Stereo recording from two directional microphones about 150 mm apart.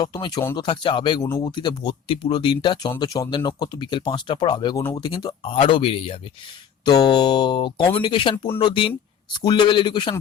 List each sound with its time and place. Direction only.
0.0 s speech: 25° left (ahead or behind)